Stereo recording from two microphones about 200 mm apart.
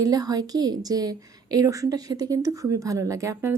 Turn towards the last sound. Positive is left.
turn(degrees=-15)  # may be behind; listen again after turning